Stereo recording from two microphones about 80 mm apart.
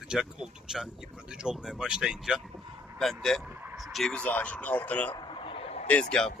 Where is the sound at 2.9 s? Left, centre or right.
Centre.